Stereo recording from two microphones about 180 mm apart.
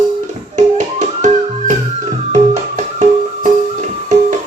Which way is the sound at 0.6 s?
45° right (ahead or behind).